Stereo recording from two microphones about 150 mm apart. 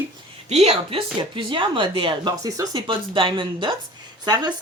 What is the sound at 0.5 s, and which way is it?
A woman's voice, 45° right (ahead or behind).